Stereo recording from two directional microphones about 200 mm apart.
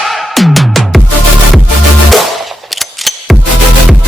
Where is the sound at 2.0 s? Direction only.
Centre (ahead or behind).